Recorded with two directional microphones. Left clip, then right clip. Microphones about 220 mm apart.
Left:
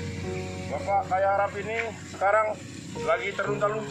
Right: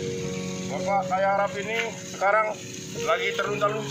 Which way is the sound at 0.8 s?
15° right (ahead or behind).